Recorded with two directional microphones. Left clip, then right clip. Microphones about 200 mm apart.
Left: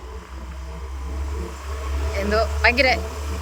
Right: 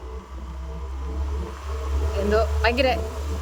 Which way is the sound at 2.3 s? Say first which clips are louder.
Left 3 dB; 25° right (ahead or behind).